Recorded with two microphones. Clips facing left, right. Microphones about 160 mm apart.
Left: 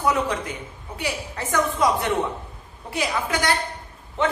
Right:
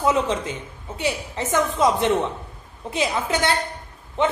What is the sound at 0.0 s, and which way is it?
A woman's voice, 20° right (ahead or behind).